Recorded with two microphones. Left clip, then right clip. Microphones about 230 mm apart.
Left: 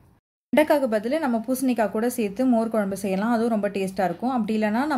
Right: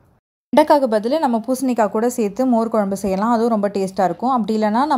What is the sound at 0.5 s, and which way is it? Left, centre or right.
A woman's voice, right.